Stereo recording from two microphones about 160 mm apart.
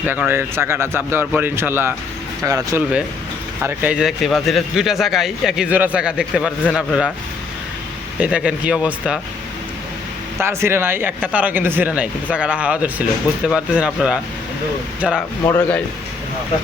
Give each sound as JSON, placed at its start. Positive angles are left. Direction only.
{"t": 0.0, "sound": "speech", "side_deg": -10}
{"t": 3.6, "sound": "speech", "side_deg": -5}
{"t": 8.2, "sound": "speech", "side_deg": -5}
{"t": 10.3, "sound": "speech", "side_deg": -15}
{"t": 15.4, "sound": "speech", "side_deg": 10}